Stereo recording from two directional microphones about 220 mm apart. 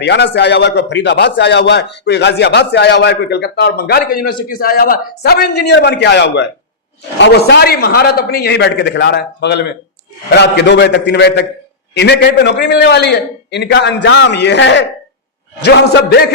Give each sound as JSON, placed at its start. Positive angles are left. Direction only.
{"t": 0.0, "sound": "a man's voice", "side_deg": 50}